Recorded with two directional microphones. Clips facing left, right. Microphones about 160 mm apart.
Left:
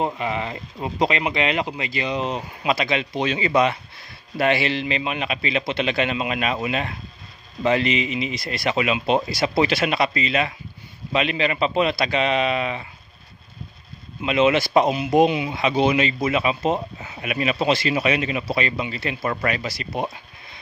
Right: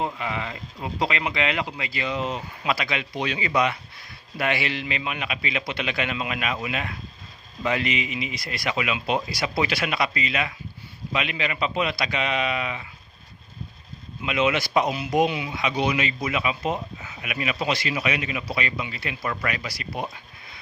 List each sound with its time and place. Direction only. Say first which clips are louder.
0.0 s a man's voice: left 4 dB; 25° left (ahead or behind)
14.3 s speech: left 5 dB; 30° left (ahead or behind)